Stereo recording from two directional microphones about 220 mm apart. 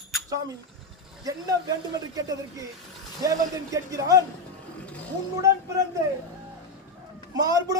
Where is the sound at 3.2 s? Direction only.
15° right (ahead or behind).